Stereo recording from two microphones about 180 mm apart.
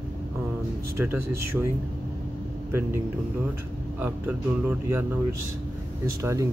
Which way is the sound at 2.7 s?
10° right (ahead or behind).